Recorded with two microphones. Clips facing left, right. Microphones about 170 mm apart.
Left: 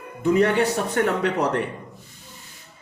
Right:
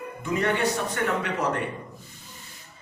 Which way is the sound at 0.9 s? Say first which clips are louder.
Left 5 dB; 65° left (ahead or behind).